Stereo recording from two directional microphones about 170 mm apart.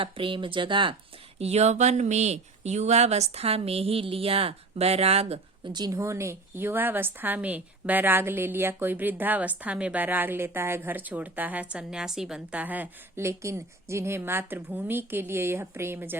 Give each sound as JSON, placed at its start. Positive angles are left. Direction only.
{"t": 0.0, "sound": "speech", "side_deg": -30}
{"t": 1.4, "sound": "speech", "side_deg": -40}